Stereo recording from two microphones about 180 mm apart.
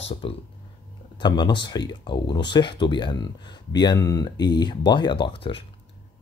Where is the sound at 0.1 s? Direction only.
30° left (ahead or behind).